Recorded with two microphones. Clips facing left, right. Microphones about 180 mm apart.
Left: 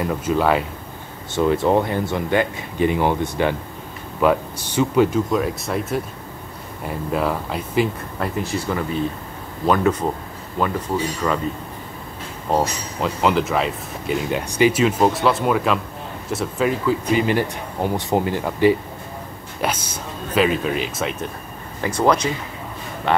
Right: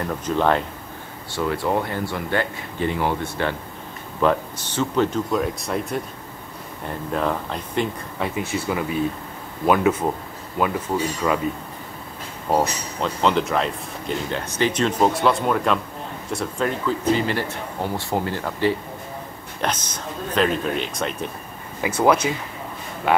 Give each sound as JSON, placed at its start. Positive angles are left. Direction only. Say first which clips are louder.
{"t": 0.0, "sound": "speech", "louder": "left 2 dB", "side_deg": 10}
{"t": 1.3, "sound": "speech", "louder": "left 5 dB", "side_deg": 20}
{"t": 12.4, "sound": "speech", "louder": "even", "side_deg": -5}